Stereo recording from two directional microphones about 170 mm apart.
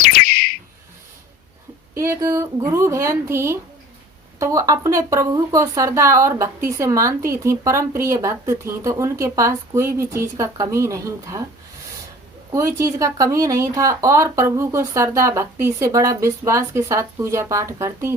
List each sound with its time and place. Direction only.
0.0 s a sound: 60° left (ahead or behind)
2.0 s speech: 15° right (ahead or behind)
12.5 s speech: 20° right (ahead or behind)